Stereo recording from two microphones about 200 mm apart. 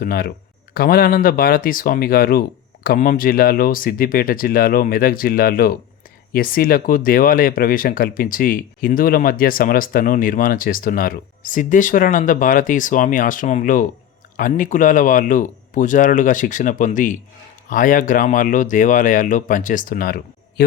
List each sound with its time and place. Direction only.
0.0 s speech: 50° left (ahead or behind)